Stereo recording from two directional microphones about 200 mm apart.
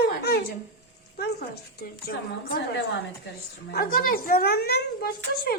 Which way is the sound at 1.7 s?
50° left (ahead or behind).